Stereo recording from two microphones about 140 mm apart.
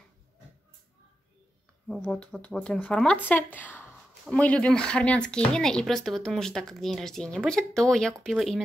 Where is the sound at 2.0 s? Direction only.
10° left (ahead or behind).